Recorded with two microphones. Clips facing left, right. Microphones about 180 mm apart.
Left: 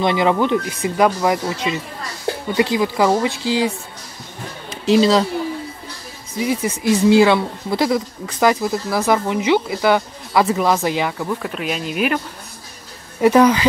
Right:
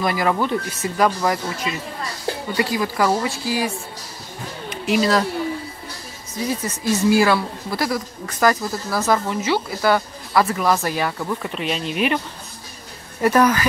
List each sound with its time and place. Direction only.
0.0 s speech: 25° left (ahead or behind)
4.8 s speech: 25° left (ahead or behind)
6.4 s speech: 10° left (ahead or behind)
11.1 s speech: 5° left (ahead or behind)
13.2 s speech: 15° left (ahead or behind)